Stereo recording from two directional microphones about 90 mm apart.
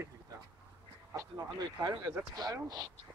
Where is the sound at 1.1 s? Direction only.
40° right (ahead or behind).